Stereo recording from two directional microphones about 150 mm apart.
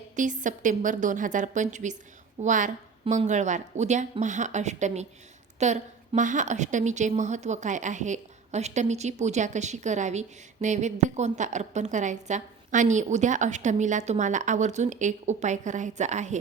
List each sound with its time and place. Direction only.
0.2 s a woman's voice: 60° right (ahead or behind)